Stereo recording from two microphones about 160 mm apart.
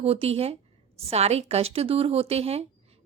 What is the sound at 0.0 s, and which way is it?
A woman's voice, 40° right (ahead or behind).